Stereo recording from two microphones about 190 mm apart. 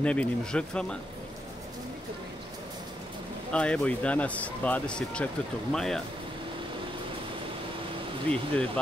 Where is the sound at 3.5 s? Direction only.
5° left (ahead or behind).